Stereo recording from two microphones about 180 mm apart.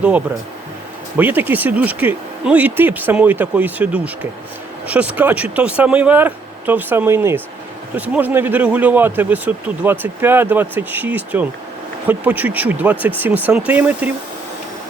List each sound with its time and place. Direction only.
1.1 s speech: 10° right (ahead or behind)